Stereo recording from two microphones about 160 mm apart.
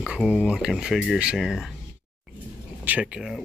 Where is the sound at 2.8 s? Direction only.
10° right (ahead or behind).